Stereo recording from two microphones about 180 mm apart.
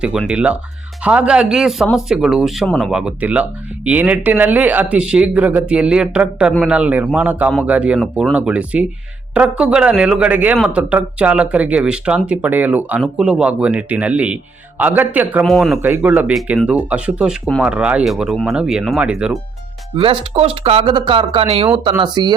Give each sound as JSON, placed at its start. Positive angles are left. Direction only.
{"t": 0.0, "sound": "a man's voice", "side_deg": -5}
{"t": 20.0, "sound": "speech", "side_deg": -30}